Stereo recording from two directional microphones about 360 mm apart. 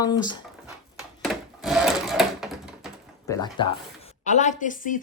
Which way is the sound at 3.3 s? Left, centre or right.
Centre.